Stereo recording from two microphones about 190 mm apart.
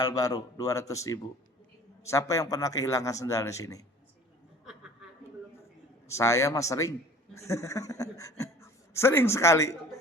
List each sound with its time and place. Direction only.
0.0 s a man's voice: 20° left (ahead or behind)
4.6 s chuckle: 5° right (ahead or behind)
6.1 s a man's voice: 15° left (ahead or behind)